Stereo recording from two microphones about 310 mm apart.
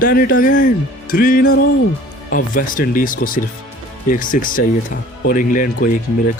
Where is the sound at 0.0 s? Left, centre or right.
Left.